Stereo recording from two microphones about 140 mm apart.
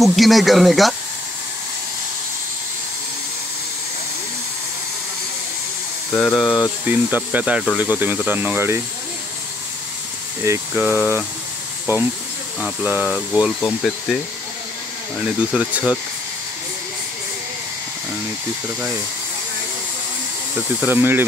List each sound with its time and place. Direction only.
0.0 s speech: centre (ahead or behind)
6.1 s speech: centre (ahead or behind)
6.9 s speech: 10° right (ahead or behind)
10.7 s speech: 10° right (ahead or behind)
20.8 s speech: 15° right (ahead or behind)